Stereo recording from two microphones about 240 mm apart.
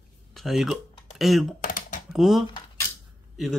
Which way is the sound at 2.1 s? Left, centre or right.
Centre.